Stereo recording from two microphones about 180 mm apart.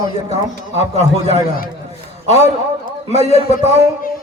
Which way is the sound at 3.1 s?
40° left (ahead or behind).